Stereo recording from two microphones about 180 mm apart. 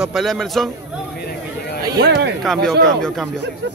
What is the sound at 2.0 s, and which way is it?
Speech, 65° right (ahead or behind).